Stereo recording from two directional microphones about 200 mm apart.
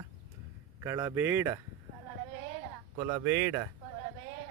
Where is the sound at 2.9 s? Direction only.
20° right (ahead or behind).